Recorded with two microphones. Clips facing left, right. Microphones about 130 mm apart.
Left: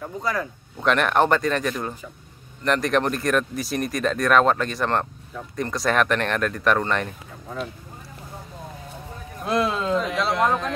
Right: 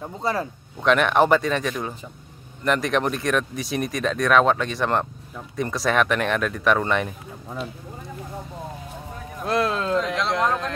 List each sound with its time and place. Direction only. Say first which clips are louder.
0.2 s speech: right 2 dB; 30° right (ahead or behind)
0.8 s speech: right 1 dB; centre (ahead or behind)
9.4 s speech: even; centre (ahead or behind)